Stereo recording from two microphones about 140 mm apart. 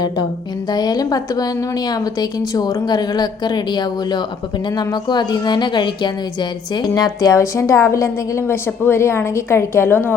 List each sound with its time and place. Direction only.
0.7 s speech: 30° left (ahead or behind)